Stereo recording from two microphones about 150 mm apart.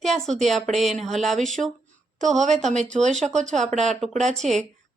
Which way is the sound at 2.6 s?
50° right (ahead or behind).